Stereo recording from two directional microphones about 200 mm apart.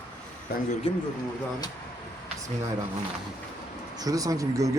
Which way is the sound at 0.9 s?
25° left (ahead or behind).